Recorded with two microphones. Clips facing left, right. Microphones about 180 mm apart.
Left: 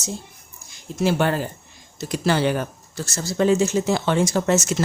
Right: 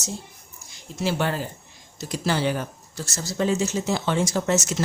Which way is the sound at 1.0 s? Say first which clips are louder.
Left 4 dB; 55° left (ahead or behind).